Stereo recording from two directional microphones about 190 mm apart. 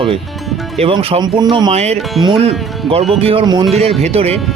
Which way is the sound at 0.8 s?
30° right (ahead or behind).